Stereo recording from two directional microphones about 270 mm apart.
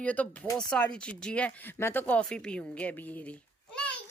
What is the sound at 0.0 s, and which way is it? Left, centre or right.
Speech, centre.